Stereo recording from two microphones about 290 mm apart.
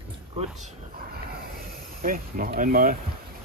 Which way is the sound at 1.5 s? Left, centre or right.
Right.